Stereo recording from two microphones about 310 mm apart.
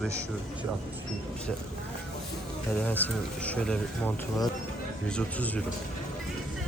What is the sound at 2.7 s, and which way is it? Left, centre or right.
Speech, centre.